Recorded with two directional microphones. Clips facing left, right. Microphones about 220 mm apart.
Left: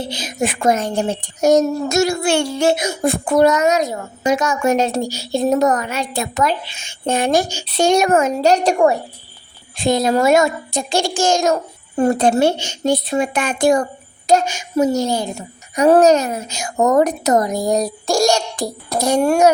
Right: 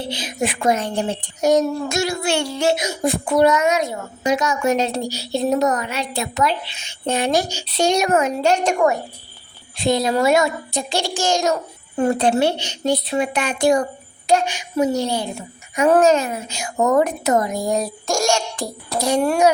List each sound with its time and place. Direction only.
0.1 s speech: 45° left (ahead or behind)
9.7 s a woman's voice: 50° left (ahead or behind)